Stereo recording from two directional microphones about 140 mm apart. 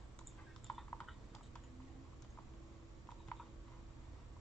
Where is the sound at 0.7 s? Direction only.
5° left (ahead or behind).